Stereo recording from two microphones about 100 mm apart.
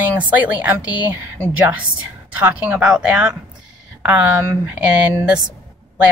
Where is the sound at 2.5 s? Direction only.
15° right (ahead or behind).